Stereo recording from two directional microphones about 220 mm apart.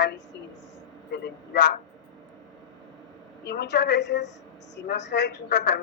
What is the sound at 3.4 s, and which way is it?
Speech, 50° left (ahead or behind).